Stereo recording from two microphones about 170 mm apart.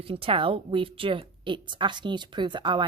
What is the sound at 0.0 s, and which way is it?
A woman's voice, 35° right (ahead or behind).